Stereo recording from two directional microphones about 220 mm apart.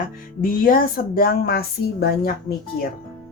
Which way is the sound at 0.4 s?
40° left (ahead or behind).